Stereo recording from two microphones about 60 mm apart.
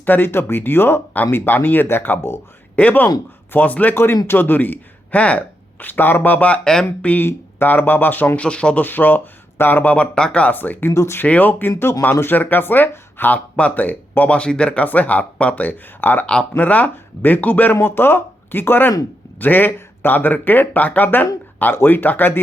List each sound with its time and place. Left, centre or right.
0.0 s speech: left
2.7 s speech: left
3.9 s speech: left
5.8 s speech: left
7.3 s speech: left
8.4 s speech: centre
8.8 s speech: left
10.5 s speech: left
10.9 s speech: left
11.3 s speech: left
16.2 s speech: centre
17.7 s speech: left